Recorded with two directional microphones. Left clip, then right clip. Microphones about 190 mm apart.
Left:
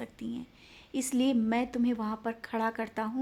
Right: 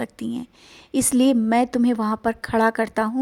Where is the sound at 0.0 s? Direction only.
45° right (ahead or behind).